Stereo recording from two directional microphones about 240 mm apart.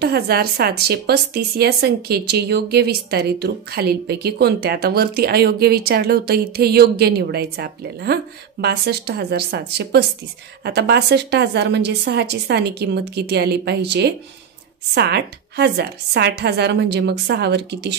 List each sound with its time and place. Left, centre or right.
0.0 s a woman's voice: right